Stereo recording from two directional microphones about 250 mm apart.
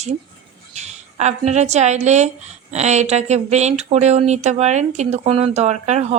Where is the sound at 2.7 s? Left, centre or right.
Right.